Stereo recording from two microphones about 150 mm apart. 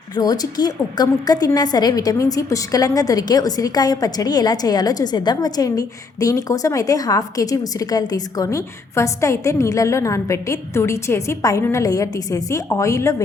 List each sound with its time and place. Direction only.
0.2 s a woman's voice: 25° left (ahead or behind)